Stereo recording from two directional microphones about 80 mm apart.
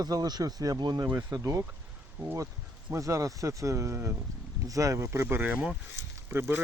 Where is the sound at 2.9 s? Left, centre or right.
Right.